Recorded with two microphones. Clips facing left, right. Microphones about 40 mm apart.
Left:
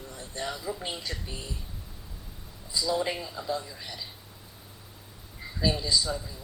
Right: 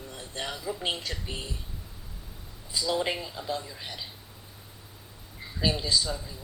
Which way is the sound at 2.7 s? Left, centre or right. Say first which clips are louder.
Even; right.